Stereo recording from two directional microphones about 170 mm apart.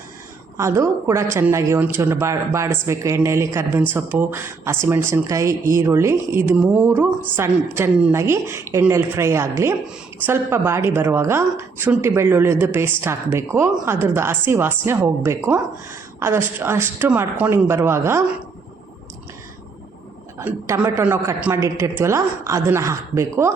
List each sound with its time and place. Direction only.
0.5 s a woman's voice: 15° right (ahead or behind)
20.4 s a woman's voice: 10° right (ahead or behind)